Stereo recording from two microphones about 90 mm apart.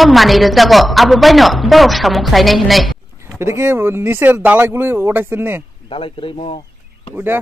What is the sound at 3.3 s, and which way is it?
Speech, 30° right (ahead or behind).